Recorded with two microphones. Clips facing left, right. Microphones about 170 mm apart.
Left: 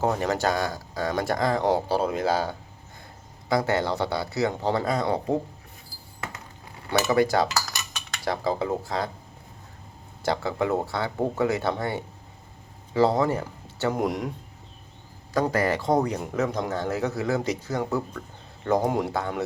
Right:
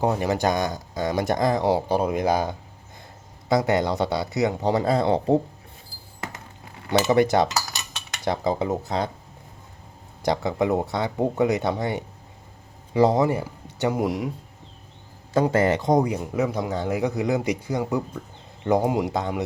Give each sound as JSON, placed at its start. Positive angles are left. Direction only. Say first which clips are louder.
{"t": 0.0, "sound": "speech", "louder": "right 2 dB", "side_deg": -15}
{"t": 4.9, "sound": "speech", "louder": "right 5 dB", "side_deg": -30}
{"t": 7.0, "sound": "cutlery", "louder": "right 2 dB", "side_deg": -25}
{"t": 10.2, "sound": "speech", "louder": "right 3 dB", "side_deg": -15}
{"t": 13.9, "sound": "speech", "louder": "even", "side_deg": -5}
{"t": 15.5, "sound": "speech", "louder": "right 3 dB", "side_deg": -20}